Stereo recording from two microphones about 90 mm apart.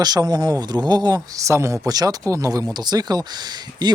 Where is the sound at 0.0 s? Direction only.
50° right (ahead or behind).